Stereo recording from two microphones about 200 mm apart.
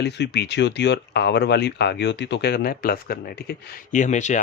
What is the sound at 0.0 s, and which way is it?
Speech, 55° left (ahead or behind).